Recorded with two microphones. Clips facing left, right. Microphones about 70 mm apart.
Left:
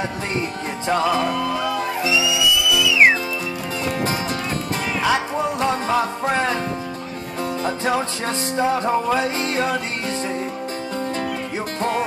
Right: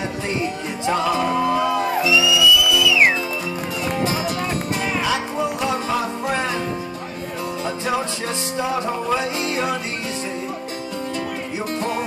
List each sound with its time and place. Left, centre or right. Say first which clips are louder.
1.2 s music: right 3 dB; right
2.0 s music: right 3 dB; left
5.6 s music: left 2 dB; left
8.5 s music: left 4 dB; left